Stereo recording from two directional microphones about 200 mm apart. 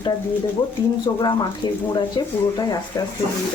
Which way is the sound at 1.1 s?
20° left (ahead or behind).